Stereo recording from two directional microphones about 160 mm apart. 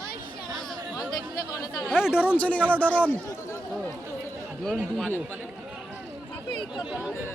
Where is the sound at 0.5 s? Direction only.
Centre (ahead or behind).